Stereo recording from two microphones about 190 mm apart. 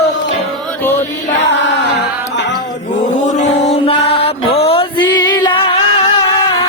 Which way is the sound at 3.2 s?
40° left (ahead or behind).